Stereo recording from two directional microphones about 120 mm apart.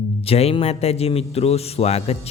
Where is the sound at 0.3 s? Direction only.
55° left (ahead or behind).